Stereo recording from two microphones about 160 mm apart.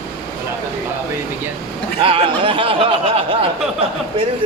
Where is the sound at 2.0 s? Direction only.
35° right (ahead or behind).